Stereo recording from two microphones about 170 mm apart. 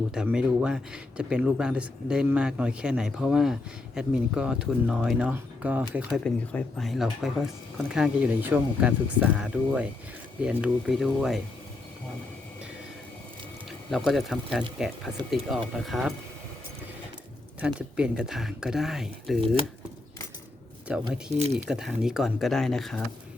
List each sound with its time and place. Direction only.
0.1 s speech: 5° right (ahead or behind)
6.2 s speech: 5° left (ahead or behind)
13.9 s speech: centre (ahead or behind)
17.6 s speech: 5° right (ahead or behind)
20.9 s speech: 5° right (ahead or behind)
21.3 s speech: 40° right (ahead or behind)
21.7 s speech: 5° right (ahead or behind)